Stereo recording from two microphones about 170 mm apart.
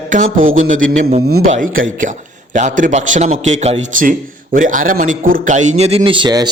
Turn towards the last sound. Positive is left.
turn(degrees=-25)  # may be behind; listen again after turning